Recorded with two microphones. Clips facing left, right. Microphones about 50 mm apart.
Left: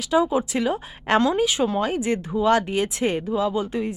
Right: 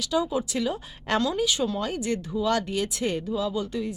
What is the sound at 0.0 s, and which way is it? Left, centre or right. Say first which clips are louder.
Speech: left 5 dB; left.